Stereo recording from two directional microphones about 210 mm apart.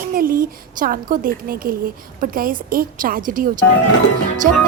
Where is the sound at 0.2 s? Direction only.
40° right (ahead or behind).